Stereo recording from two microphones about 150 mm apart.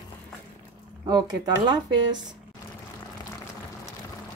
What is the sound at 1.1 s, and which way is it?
Speech, 30° right (ahead or behind).